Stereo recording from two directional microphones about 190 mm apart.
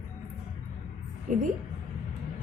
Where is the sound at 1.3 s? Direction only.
40° right (ahead or behind).